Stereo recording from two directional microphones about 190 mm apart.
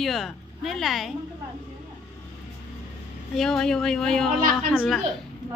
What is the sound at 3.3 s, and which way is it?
Speech, centre (ahead or behind).